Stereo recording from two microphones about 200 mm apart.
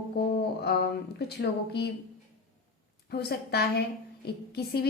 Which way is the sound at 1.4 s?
55° left (ahead or behind).